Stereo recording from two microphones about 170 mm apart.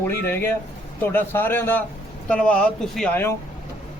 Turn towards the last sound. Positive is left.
turn(degrees=15)  # may be behind; listen again after turning